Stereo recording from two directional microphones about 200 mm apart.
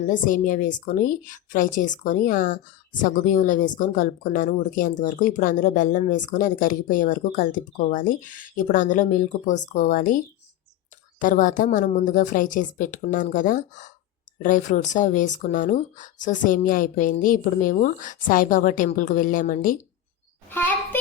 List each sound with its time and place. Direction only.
0.1 s a woman's voice: 40° left (ahead or behind)
11.2 s a woman's voice: 40° left (ahead or behind)
20.5 s child singing: 10° left (ahead or behind)